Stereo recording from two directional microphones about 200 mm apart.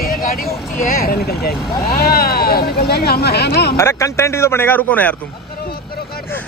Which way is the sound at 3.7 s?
15° left (ahead or behind).